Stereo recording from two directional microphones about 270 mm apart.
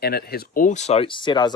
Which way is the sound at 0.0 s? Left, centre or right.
Left.